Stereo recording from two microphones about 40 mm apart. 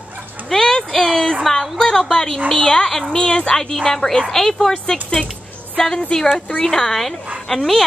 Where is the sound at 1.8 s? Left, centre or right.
Centre.